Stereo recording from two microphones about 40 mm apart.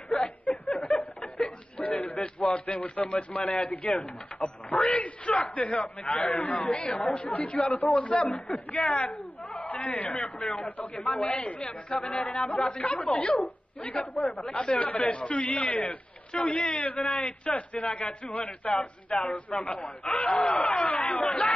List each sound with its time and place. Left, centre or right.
0.2 s a sound: left
0.7 s chuckle: left
1.4 s a sound: left
2.2 s speech: left
6.7 s a man's voice: left
7.0 s speech: left
9.6 s a sound: left
10.2 s speech: left
12.0 s a man's voice: left
12.4 s speech: left
14.5 s speech: left